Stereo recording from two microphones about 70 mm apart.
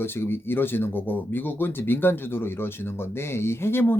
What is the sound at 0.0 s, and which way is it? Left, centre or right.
Speech, left.